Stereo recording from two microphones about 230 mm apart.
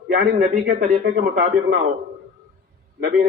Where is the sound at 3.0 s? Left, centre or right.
Right.